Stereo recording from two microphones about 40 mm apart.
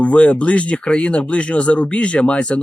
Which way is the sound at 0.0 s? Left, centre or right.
Left.